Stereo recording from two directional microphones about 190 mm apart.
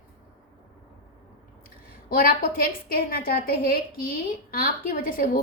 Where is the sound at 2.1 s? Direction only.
50° left (ahead or behind).